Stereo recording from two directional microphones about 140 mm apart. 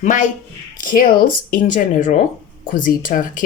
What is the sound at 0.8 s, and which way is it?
Speech, 85° left.